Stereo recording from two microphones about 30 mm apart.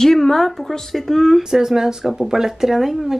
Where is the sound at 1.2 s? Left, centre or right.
Centre.